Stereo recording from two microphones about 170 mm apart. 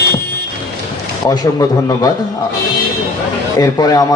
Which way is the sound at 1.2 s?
20° left (ahead or behind).